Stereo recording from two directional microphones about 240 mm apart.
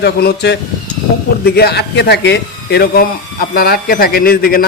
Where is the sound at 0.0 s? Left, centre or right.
Left.